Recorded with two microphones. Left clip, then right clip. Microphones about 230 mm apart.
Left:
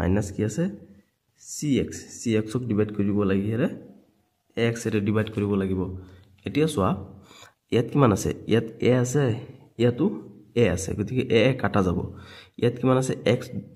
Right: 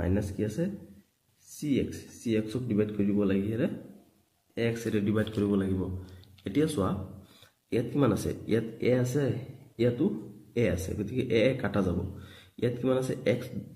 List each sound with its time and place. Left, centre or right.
0.0 s a man's voice: left